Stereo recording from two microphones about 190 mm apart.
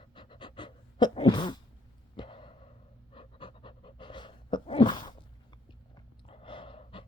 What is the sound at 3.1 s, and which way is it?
Pant, 25° left (ahead or behind).